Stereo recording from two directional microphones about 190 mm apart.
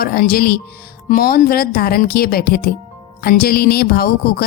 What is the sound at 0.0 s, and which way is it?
Speech, 50° left (ahead or behind).